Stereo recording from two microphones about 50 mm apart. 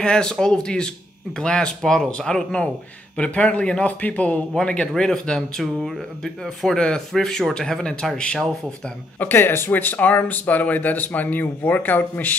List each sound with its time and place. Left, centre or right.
0.0 s speech: centre
3.2 s speech: left
4.6 s speech: centre
5.6 s speech: centre
9.2 s speech: left